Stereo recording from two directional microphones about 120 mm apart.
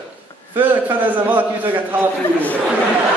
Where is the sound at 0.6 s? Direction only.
15° right (ahead or behind).